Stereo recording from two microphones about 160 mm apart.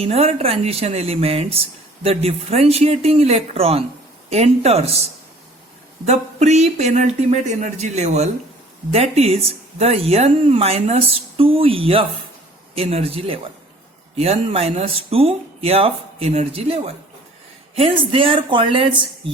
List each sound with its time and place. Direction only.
0.0 s speech: 40° right (ahead or behind)
6.1 s speech: 45° right (ahead or behind)